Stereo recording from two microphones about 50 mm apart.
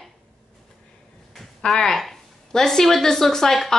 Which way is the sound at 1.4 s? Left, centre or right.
Centre.